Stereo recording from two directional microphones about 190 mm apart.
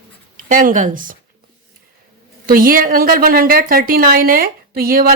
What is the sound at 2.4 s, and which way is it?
A woman's voice, 50° right (ahead or behind).